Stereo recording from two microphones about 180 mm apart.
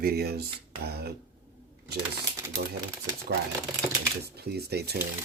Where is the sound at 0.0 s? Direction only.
60° right (ahead or behind).